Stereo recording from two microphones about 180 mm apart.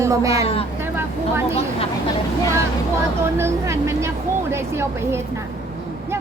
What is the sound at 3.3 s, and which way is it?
Speech, 15° right (ahead or behind).